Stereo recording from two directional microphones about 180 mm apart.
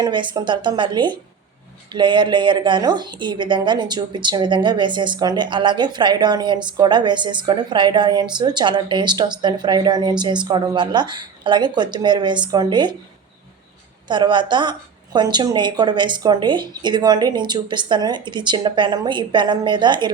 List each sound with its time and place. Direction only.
0.0 s a woman's voice: 25° right (ahead or behind)
14.1 s a woman's voice: 25° right (ahead or behind)